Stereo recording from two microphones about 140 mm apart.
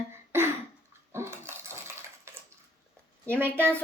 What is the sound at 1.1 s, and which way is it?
Coin, 20° right (ahead or behind).